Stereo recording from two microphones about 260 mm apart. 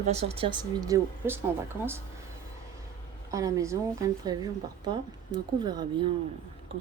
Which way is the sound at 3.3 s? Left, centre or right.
Centre.